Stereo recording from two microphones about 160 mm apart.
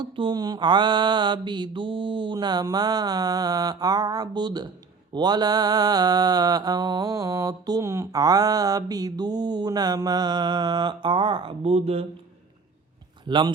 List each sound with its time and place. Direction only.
0.0 s mantra: 30° right (ahead or behind)
13.2 s speech: 30° right (ahead or behind)